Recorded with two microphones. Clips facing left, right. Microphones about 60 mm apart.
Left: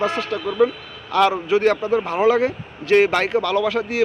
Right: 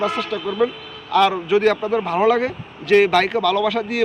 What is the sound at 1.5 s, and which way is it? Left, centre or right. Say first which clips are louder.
Speech: even; left.